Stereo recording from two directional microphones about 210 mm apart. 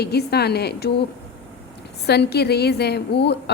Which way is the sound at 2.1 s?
50° left (ahead or behind).